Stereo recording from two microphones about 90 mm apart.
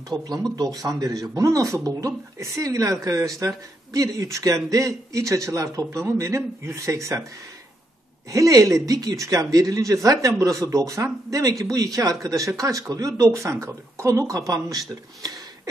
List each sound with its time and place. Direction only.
0.2 s speech: 45° right (ahead or behind)
8.3 s speech: 40° right (ahead or behind)